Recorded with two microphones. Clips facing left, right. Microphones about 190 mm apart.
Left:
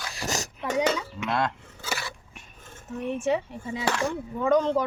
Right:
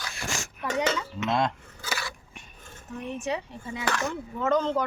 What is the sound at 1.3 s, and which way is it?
Speech, 20° right (ahead or behind).